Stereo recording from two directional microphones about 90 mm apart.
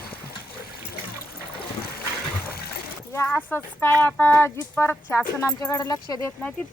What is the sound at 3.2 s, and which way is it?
Speech, 20° left (ahead or behind).